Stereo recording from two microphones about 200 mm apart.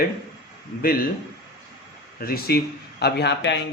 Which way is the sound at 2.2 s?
50° left (ahead or behind).